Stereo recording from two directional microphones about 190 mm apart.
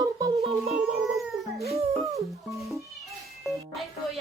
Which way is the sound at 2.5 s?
Centre (ahead or behind).